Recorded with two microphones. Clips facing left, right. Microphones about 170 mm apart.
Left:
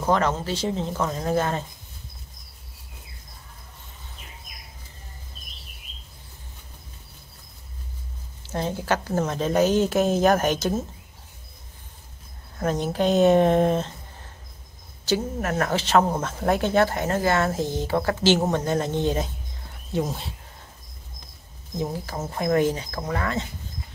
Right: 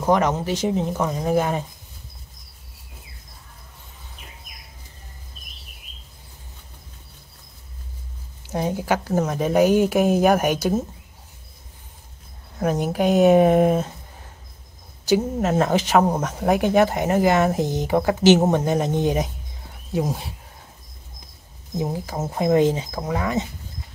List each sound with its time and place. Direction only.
0.0 s speech: 15° right (ahead or behind)
8.4 s speech: 15° right (ahead or behind)
12.5 s speech: 10° right (ahead or behind)
15.0 s speech: 20° right (ahead or behind)
21.7 s speech: 15° right (ahead or behind)